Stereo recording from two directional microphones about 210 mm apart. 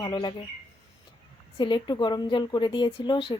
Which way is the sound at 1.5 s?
20° left (ahead or behind).